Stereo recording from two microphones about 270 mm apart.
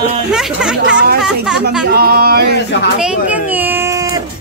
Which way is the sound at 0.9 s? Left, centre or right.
Right.